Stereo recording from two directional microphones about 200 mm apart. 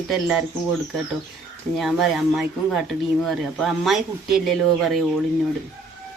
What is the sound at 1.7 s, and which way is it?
Speech, centre (ahead or behind).